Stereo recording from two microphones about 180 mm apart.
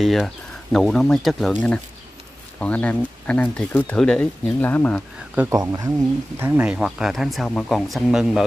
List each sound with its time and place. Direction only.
0.0 s speech: centre (ahead or behind)
5.5 s speech: 20° right (ahead or behind); by 8.4 s centre (ahead or behind)